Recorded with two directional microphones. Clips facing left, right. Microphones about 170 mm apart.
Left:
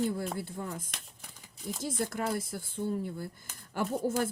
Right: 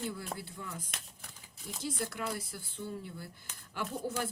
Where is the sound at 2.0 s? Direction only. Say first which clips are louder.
Left 7 dB; 45° left (ahead or behind).